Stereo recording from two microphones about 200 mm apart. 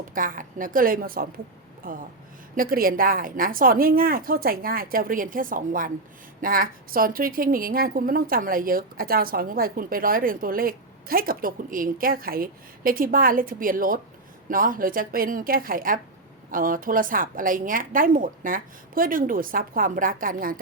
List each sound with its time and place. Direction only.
0.1 s a woman's voice: 45° right (ahead or behind)